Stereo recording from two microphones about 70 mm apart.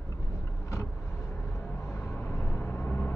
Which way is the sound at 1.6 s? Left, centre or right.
Left.